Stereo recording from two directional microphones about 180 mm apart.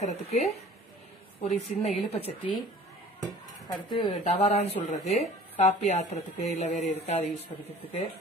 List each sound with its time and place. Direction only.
0.0 s speech: 35° left (ahead or behind)
3.2 s dishes: 25° left (ahead or behind)
4.1 s speech: 40° left (ahead or behind)